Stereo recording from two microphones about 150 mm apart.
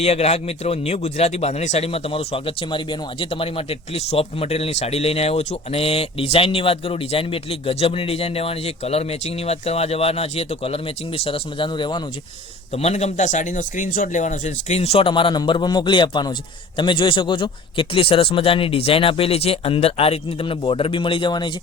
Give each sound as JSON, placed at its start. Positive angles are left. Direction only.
{"t": 0.0, "sound": "a man's voice", "side_deg": 45}
{"t": 12.7, "sound": "a man's voice", "side_deg": 45}